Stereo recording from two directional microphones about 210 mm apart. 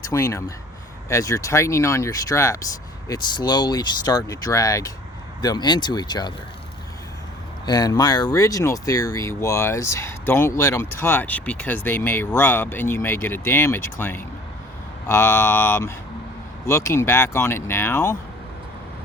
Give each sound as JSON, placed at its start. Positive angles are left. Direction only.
{"t": 0.1, "sound": "speech", "side_deg": 15}
{"t": 7.6, "sound": "speech", "side_deg": 20}